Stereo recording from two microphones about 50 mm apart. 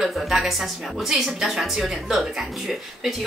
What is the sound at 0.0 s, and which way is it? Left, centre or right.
A woman's voice, centre.